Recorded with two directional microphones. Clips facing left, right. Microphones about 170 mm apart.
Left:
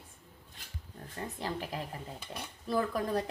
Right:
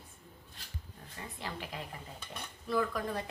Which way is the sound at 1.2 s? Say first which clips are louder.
Left 5 dB; 40° left (ahead or behind).